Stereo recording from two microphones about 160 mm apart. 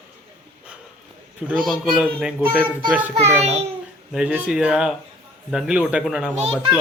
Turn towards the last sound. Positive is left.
turn(degrees=-40)  # may be behind; listen again after turning